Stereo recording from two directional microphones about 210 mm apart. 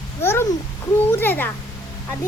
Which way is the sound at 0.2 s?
10° left (ahead or behind).